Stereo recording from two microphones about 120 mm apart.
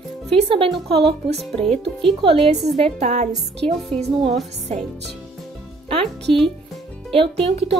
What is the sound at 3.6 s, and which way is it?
Speech, 55° right (ahead or behind).